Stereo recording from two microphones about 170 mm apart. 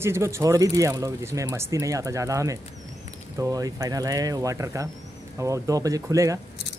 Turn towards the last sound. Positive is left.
turn(degrees=-20)  # may be behind; listen again after turning